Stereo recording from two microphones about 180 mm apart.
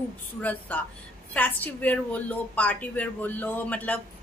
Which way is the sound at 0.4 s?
10° left (ahead or behind).